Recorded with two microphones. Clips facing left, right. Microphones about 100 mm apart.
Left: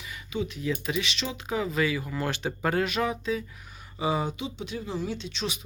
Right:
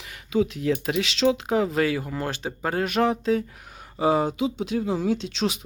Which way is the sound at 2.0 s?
35° right (ahead or behind).